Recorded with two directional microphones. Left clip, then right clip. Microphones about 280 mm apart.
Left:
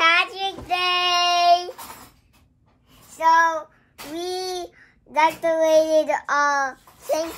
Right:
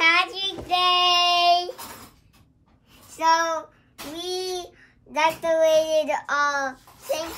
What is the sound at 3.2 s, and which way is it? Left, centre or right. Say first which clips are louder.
Speech: left 2 dB; left.